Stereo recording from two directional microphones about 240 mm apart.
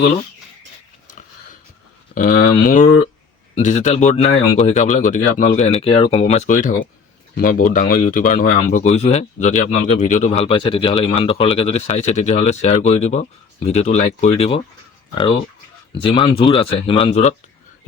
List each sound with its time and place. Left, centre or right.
2.1 s speech: left